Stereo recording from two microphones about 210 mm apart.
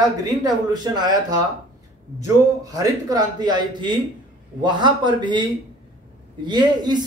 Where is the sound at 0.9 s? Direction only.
20° right (ahead or behind).